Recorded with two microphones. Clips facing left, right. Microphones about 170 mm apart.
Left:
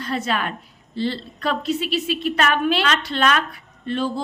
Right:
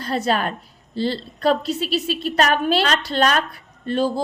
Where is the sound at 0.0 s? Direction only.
35° right (ahead or behind).